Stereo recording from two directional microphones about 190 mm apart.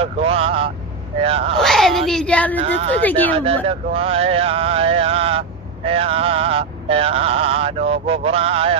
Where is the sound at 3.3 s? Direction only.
30° right (ahead or behind).